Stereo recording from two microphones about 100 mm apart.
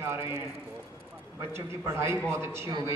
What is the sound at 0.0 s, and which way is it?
Speech, 25° right (ahead or behind).